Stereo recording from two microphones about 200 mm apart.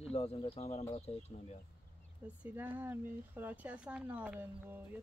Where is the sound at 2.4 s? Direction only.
10° right (ahead or behind).